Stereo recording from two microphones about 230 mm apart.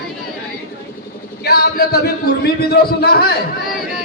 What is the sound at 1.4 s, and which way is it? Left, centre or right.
Speech, left.